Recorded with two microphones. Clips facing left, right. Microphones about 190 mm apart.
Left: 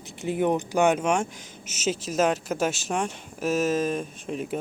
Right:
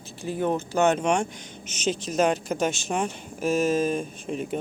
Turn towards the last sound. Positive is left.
turn(degrees=0)  # may be behind; listen again after turning